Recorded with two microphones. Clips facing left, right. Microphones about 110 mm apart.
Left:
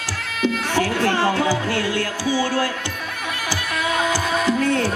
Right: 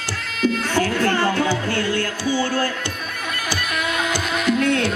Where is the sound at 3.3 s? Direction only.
60° right (ahead or behind).